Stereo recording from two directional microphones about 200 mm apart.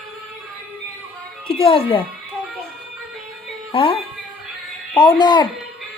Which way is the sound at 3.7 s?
25° left (ahead or behind).